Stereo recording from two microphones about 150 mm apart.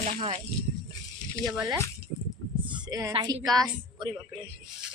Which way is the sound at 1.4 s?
Centre (ahead or behind).